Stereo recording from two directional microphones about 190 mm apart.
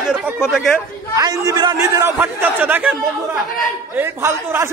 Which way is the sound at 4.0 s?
15° right (ahead or behind).